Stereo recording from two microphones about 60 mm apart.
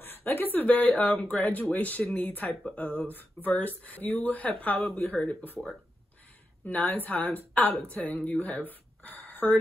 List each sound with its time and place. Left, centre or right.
0.0 s speech: left
6.6 s speech: left